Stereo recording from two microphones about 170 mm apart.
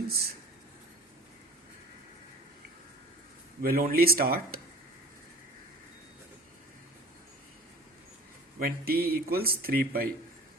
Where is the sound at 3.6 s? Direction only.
60° right (ahead or behind).